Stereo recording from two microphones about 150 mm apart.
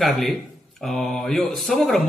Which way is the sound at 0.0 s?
Centre (ahead or behind).